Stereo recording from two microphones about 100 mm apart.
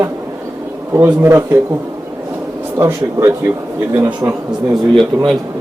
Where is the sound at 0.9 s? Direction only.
25° right (ahead or behind).